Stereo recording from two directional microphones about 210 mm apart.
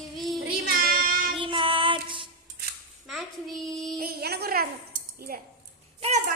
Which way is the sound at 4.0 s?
50° right (ahead or behind).